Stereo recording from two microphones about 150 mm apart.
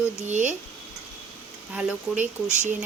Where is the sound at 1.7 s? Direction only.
5° right (ahead or behind).